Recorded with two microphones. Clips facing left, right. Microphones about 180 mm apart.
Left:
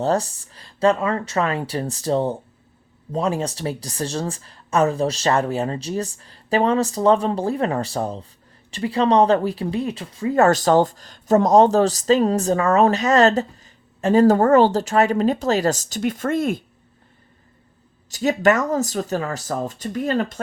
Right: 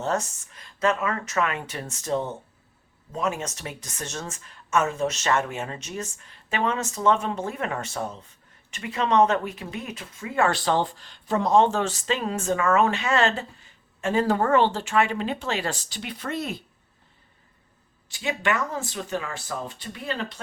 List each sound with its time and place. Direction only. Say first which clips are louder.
0.0 s speech: left 6 dB; 35° left (ahead or behind); by 16.6 s 50° left (ahead or behind)
18.1 s speech: left 9 dB; 40° left (ahead or behind)